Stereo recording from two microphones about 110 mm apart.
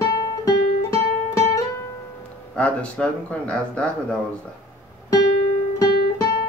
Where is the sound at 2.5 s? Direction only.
10° left (ahead or behind).